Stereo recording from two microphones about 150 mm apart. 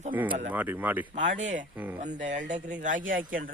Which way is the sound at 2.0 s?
55° right (ahead or behind).